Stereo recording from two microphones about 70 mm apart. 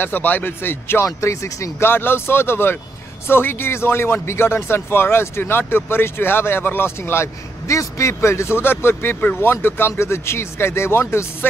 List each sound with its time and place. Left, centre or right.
0.0 s speech: left
1.0 s speech: left
1.9 s speech: left